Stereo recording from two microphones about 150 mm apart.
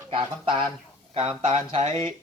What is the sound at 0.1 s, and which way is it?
A man's voice, 35° right (ahead or behind).